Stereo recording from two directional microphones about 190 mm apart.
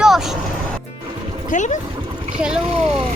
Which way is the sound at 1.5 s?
40° left (ahead or behind).